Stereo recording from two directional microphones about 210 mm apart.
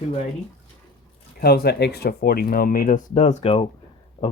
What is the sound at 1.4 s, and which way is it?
Speech, 45° left (ahead or behind).